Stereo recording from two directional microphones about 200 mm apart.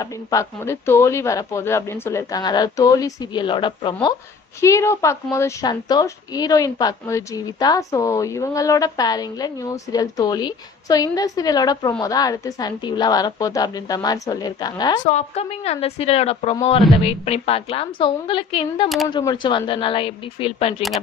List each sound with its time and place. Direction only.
0.0 s a woman's voice: 15° left (ahead or behind)
15.0 s a woman's voice: 35° left (ahead or behind)